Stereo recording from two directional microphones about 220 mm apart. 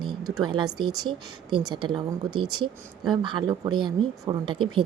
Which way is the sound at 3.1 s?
20° right (ahead or behind).